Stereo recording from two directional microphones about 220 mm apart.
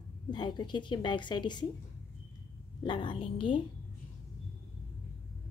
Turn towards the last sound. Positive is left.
turn(degrees=25)  # may be behind; listen again after turning